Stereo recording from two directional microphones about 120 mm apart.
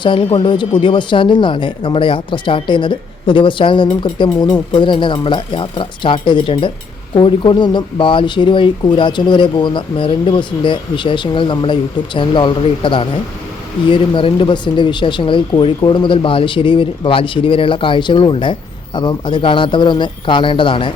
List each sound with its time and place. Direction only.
0.0 s speech: 45° left (ahead or behind)